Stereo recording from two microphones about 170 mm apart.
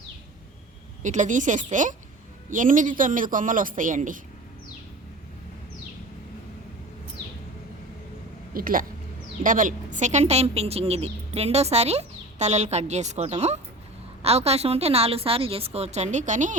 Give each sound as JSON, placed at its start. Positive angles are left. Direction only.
{"t": 1.0, "sound": "speech", "side_deg": -45}
{"t": 8.5, "sound": "a woman's voice", "side_deg": -55}